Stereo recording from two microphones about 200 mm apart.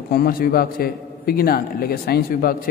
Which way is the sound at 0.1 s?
50° left (ahead or behind).